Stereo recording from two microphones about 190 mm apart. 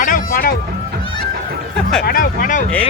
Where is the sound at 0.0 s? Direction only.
45° left (ahead or behind).